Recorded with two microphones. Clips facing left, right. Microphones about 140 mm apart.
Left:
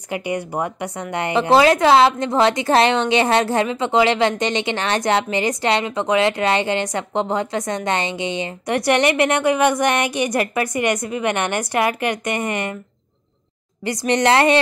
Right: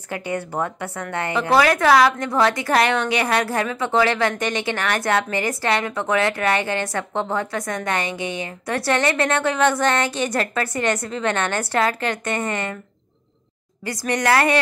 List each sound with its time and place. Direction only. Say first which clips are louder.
0.1 s a woman's voice: left 2 dB; 15° left (ahead or behind)
13.8 s a woman's voice: left 4 dB; 20° left (ahead or behind)